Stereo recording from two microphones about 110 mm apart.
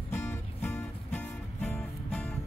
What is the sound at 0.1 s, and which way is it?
Music, 20° left (ahead or behind).